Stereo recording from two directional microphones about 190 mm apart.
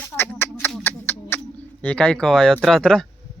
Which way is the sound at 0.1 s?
10° left (ahead or behind).